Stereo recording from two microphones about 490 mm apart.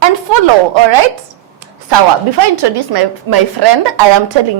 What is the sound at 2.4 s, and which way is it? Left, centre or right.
Speech, right.